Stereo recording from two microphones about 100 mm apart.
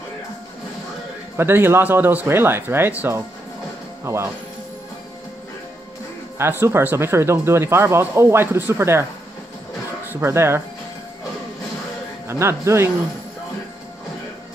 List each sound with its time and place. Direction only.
1.3 s speech: 25° right (ahead or behind)
6.6 s speech: 20° right (ahead or behind)
10.2 s speech: 25° right (ahead or behind)
12.3 s speech: 25° right (ahead or behind)